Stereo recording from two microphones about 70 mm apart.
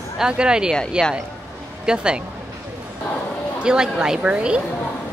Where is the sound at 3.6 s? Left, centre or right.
Centre.